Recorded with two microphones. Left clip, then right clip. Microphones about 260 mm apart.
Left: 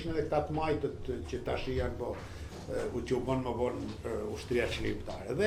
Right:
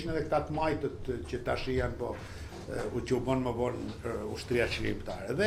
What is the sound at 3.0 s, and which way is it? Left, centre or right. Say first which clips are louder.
Speech: right 5 dB; right.